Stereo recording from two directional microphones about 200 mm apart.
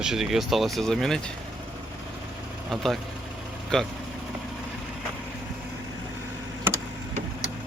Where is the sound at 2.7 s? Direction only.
Centre (ahead or behind).